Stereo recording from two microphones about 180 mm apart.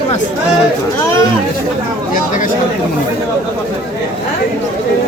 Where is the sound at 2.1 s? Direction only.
50° left (ahead or behind).